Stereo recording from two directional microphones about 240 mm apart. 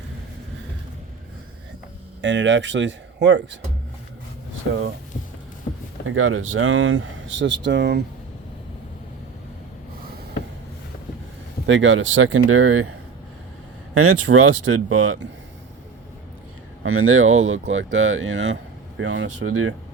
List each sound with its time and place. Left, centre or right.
2.2 s speech: right
6.1 s speech: right
11.6 s speech: right
13.9 s speech: right
14.5 s speech: right
16.8 s speech: right